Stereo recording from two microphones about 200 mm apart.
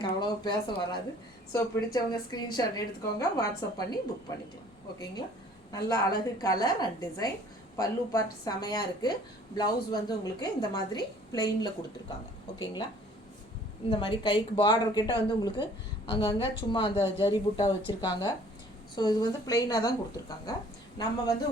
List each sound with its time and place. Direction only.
0.0 s a woman's voice: 20° left (ahead or behind)
5.7 s a woman's voice: 20° left (ahead or behind)
13.9 s a woman's voice: 25° left (ahead or behind)